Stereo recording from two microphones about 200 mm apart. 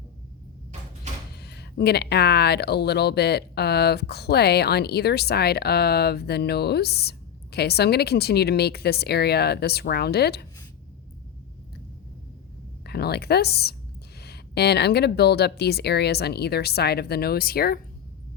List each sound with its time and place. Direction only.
1.4 s speech: 55° left (ahead or behind)
12.8 s speech: 55° left (ahead or behind)